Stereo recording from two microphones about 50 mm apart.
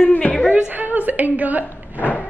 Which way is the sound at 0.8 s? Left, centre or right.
Right.